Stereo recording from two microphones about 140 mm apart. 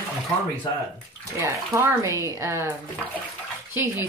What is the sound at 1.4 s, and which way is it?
Speech, 20° right (ahead or behind).